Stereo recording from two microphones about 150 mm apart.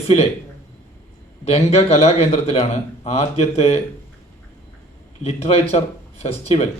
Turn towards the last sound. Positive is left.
turn(degrees=45)  # may be behind; listen again after turning